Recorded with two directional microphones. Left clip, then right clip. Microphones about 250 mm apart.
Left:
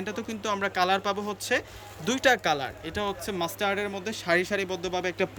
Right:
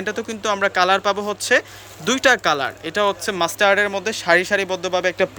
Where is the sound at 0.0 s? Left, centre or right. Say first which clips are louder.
Right 9 dB; centre.